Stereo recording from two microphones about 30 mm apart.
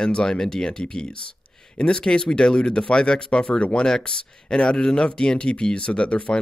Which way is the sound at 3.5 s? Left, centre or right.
Left.